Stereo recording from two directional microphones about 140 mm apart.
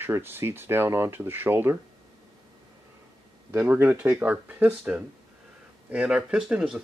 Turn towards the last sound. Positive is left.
turn(degrees=-5)  # may be behind; listen again after turning